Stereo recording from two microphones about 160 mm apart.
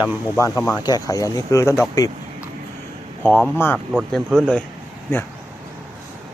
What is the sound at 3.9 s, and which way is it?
Speech, 5° right (ahead or behind).